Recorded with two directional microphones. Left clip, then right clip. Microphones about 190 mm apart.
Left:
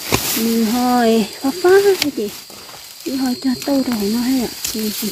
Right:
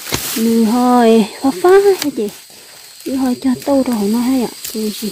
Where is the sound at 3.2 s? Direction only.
35° right (ahead or behind).